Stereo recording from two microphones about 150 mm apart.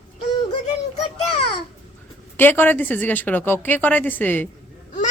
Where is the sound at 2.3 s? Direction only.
15° left (ahead or behind).